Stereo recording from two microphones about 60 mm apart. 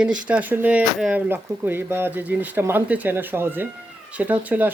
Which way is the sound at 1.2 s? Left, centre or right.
Right.